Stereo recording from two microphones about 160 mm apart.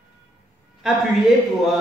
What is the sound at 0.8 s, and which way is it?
Speech, 5° right (ahead or behind).